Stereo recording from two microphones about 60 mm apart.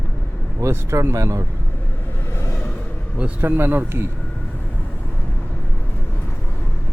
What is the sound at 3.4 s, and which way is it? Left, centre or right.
Speech, right.